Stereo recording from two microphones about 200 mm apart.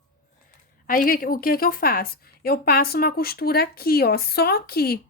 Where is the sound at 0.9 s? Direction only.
45° left (ahead or behind).